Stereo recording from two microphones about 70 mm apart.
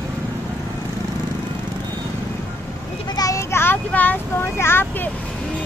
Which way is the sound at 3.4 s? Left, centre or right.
Left.